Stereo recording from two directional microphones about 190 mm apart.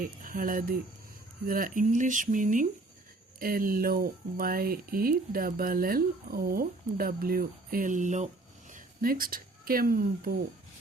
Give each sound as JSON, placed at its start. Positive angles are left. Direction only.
{"t": 0.0, "sound": "speech", "side_deg": -45}